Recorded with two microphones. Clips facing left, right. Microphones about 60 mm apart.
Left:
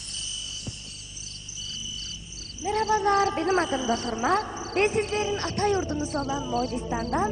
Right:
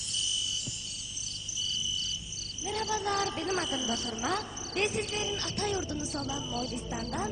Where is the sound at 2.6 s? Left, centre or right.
Left.